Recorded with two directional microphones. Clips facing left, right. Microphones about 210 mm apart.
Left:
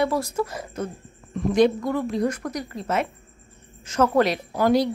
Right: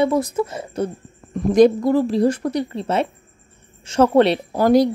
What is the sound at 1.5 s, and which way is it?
Speech, 40° right (ahead or behind).